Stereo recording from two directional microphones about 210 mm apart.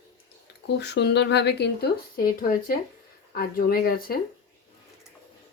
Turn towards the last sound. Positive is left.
turn(degrees=45)  # may be behind; listen again after turning